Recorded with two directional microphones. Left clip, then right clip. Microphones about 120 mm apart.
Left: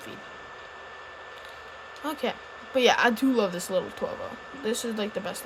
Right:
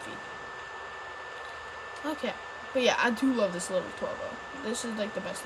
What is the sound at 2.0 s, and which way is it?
A woman's voice, 70° left (ahead or behind).